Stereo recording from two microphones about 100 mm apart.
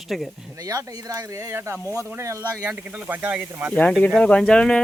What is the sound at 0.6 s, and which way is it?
Speech, 35° right (ahead or behind).